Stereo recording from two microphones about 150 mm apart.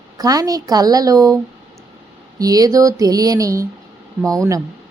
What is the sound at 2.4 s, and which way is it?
Speech, 25° right (ahead or behind).